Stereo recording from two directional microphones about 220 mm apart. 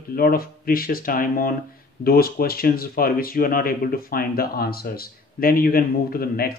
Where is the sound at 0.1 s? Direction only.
40° left (ahead or behind).